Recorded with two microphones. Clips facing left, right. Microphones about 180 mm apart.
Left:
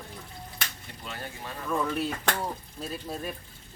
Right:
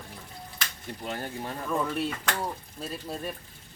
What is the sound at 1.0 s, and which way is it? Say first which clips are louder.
Speech: right 5 dB; 45° right (ahead or behind).